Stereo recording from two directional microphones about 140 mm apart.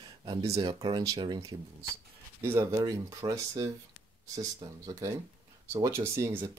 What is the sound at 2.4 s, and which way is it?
Speech, 20° right (ahead or behind).